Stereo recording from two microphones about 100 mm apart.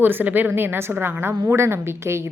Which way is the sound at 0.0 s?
20° right (ahead or behind).